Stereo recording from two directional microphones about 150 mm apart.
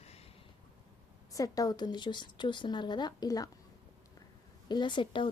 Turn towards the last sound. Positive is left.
turn(degrees=35)  # may be behind; listen again after turning